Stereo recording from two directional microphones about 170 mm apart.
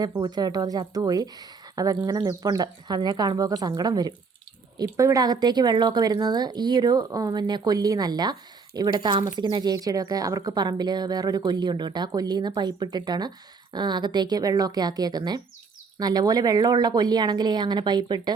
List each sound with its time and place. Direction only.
0.2 s a woman's voice: 25° right (ahead or behind)